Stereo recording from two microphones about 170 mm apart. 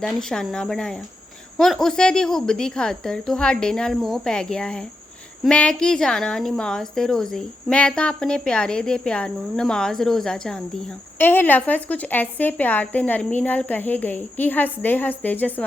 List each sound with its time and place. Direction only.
0.0 s a woman's voice: centre (ahead or behind)